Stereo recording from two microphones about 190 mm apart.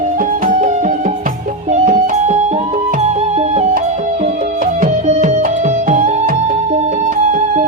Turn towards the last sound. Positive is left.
turn(degrees=-45)  # may be behind; listen again after turning